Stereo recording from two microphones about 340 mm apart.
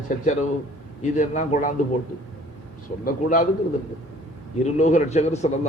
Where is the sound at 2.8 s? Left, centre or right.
Left.